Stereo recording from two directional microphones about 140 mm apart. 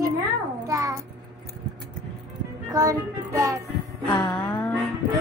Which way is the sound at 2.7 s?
25° right (ahead or behind).